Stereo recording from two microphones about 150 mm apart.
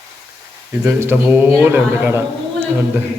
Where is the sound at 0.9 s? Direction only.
15° right (ahead or behind).